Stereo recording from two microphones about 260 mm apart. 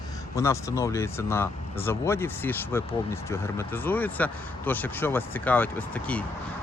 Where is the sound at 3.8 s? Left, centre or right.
Centre.